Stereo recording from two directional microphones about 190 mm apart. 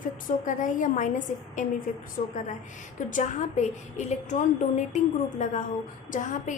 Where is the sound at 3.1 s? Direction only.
40° left (ahead or behind).